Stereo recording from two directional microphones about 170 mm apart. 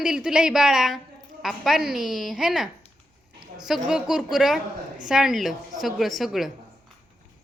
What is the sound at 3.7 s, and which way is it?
Speech, 5° right (ahead or behind).